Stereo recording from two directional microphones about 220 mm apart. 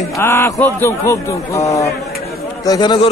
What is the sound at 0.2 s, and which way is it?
A man's voice, 10° left (ahead or behind).